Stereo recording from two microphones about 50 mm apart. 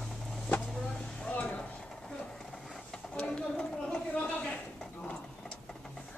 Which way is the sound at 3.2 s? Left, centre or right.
Centre.